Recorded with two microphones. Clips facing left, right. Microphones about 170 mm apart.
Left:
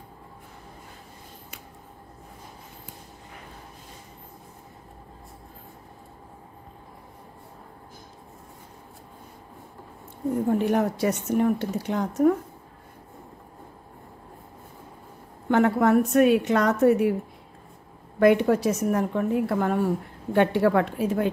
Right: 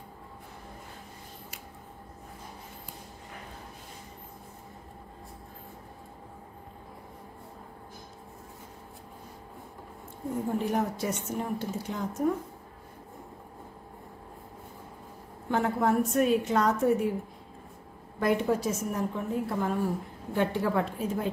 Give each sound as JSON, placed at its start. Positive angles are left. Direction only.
{"t": 10.6, "sound": "a woman's voice", "side_deg": 70}
{"t": 15.4, "sound": "a woman's voice", "side_deg": 70}
{"t": 18.2, "sound": "a woman's voice", "side_deg": 70}